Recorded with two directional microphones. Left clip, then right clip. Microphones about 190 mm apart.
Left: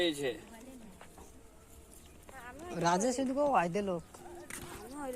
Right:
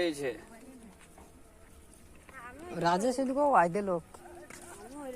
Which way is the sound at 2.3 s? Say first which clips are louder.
Right 1 dB; 25° right (ahead or behind).